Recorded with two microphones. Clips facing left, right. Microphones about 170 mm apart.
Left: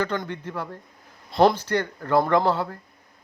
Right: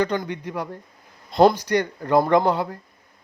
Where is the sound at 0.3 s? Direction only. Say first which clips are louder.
Right 3 dB; 15° right (ahead or behind).